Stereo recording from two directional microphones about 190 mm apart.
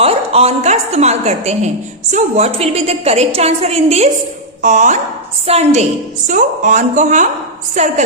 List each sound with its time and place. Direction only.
0.0 s a woman's voice: 30° right (ahead or behind)